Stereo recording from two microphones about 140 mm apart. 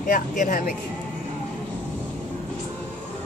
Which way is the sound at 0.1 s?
75° left (ahead or behind).